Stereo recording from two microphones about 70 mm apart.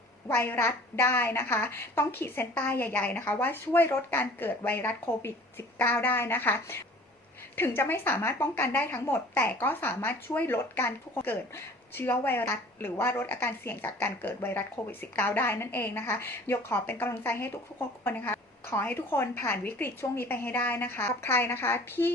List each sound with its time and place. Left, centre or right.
0.3 s a woman's voice: left